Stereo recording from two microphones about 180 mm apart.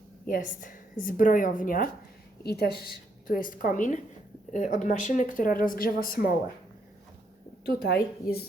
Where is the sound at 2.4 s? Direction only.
60° left (ahead or behind).